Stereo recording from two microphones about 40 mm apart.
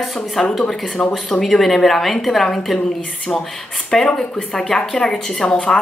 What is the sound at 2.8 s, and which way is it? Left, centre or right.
Speech, centre.